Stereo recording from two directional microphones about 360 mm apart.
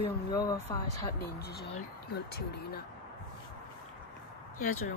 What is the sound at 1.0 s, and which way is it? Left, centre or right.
Speech, left.